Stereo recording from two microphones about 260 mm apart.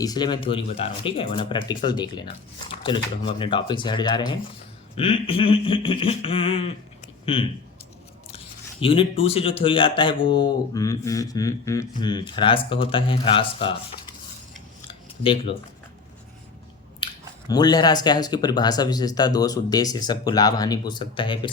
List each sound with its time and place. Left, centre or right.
0.0 s speech: centre
8.8 s speech: left
14.8 s a sound: left
17.0 s chewing: centre
17.5 s speech: centre